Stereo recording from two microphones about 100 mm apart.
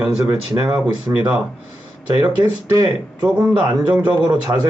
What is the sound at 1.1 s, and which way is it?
Speech, 20° right (ahead or behind).